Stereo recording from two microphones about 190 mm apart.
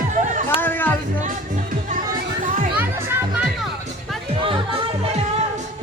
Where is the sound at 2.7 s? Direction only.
10° right (ahead or behind).